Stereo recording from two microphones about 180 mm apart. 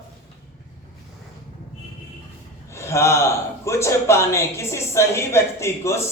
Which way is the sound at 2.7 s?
15° left (ahead or behind).